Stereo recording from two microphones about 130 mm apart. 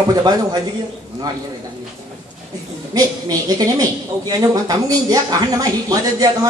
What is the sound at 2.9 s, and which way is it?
A woman's voice, 30° right (ahead or behind).